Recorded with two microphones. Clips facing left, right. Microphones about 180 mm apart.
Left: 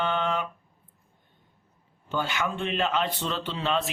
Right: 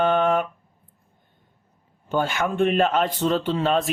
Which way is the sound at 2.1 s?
50° right (ahead or behind).